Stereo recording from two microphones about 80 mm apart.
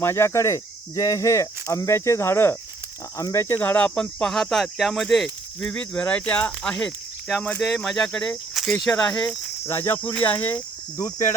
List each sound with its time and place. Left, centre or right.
0.0 s cricket: left
3.2 s speech: left
3.5 s speech: left; by 7.4 s centre
7.4 s speech: centre
7.7 s speech: centre
9.6 s cricket: left
10.0 s speech: centre
10.9 s cricket: left